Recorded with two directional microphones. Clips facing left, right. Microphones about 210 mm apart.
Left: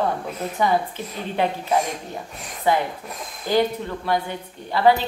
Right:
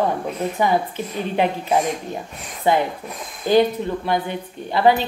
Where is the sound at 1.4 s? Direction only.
20° right (ahead or behind).